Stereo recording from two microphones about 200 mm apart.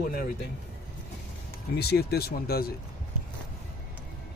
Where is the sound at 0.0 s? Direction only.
45° left (ahead or behind).